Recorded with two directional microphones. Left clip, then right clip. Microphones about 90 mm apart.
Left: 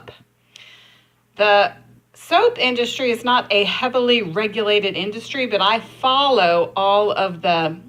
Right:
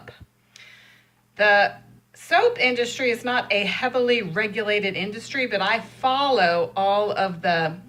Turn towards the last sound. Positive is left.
turn(degrees=40)  # may be behind; listen again after turning